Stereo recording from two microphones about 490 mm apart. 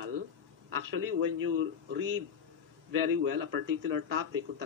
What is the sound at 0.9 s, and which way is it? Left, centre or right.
Speech, right.